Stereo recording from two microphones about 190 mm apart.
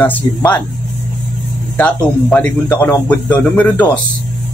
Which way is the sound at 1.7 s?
5° left (ahead or behind).